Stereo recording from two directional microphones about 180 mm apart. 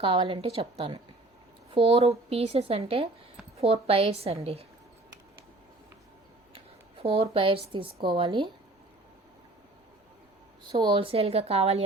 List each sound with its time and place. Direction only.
0.0 s speech: 30° right (ahead or behind)
7.0 s speech: 35° right (ahead or behind)
10.7 s speech: 25° right (ahead or behind)